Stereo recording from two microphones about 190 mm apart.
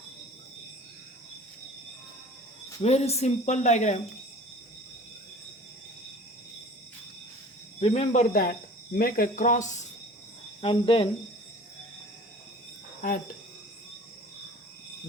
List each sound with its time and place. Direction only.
2.8 s speech: 35° left (ahead or behind)
7.8 s speech: 35° left (ahead or behind)
10.6 s speech: 30° left (ahead or behind)
13.0 s speech: 45° left (ahead or behind)